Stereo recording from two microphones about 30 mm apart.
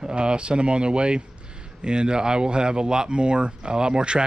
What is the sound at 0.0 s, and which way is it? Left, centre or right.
Speech, right.